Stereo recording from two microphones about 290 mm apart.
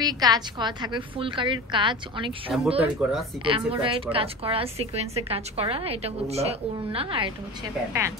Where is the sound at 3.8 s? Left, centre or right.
Centre.